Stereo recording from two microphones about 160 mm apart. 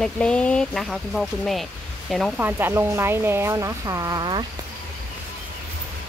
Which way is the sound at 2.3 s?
10° right (ahead or behind).